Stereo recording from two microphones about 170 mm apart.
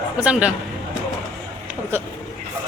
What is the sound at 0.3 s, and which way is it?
Speech, 5° right (ahead or behind).